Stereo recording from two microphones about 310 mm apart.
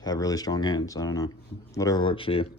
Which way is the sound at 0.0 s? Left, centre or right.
Centre.